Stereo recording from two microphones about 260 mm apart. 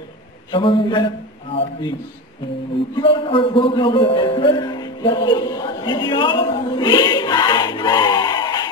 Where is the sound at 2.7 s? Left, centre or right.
Centre.